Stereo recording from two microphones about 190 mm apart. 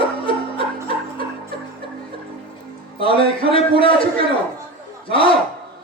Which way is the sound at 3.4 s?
30° left (ahead or behind).